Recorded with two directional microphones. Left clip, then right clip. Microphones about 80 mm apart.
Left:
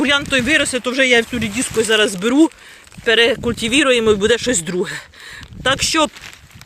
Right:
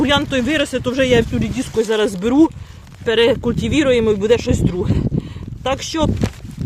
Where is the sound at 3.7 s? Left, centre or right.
Centre.